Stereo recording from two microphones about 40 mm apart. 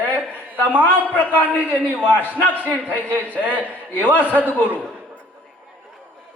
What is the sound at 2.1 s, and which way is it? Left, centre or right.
Speech, right.